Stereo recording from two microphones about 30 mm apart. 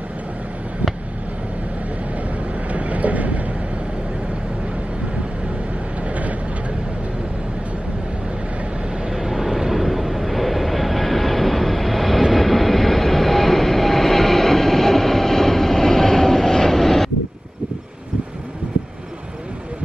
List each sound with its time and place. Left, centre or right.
2.7 s vehicle: right
6.0 s vehicle: right
9.1 s vehicle: centre